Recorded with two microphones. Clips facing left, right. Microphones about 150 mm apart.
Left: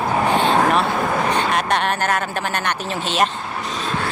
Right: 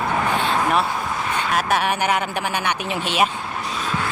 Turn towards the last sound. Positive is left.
turn(degrees=-10)  # may be behind; listen again after turning